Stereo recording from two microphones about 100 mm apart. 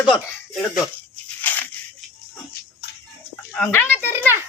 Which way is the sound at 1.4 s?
20° left (ahead or behind).